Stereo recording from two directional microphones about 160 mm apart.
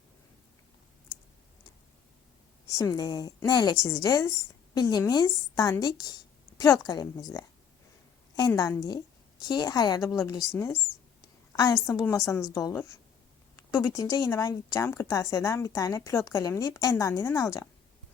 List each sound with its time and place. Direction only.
2.6 s a woman's voice: 20° left (ahead or behind)